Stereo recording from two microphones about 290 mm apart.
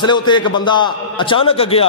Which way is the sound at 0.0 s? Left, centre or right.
Centre.